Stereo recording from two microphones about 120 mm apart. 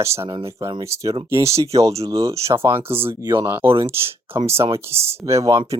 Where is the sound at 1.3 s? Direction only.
60° right (ahead or behind).